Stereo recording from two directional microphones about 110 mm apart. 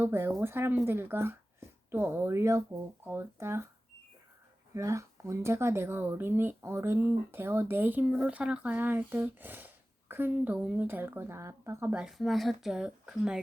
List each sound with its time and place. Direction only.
0.0 s speech: 20° right (ahead or behind)
4.7 s speech: 30° right (ahead or behind)
11.9 s speech: 5° right (ahead or behind)